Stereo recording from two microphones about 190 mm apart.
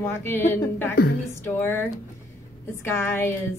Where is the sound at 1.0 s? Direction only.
55° left (ahead or behind).